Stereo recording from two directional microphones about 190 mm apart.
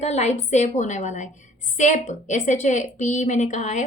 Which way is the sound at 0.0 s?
35° left (ahead or behind).